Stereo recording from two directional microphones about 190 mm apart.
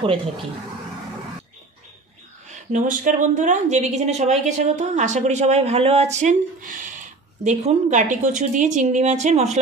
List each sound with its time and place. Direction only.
2.7 s speech: 45° right (ahead or behind)